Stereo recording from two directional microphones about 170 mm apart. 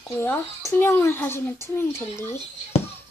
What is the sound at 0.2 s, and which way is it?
Speech, 15° left (ahead or behind).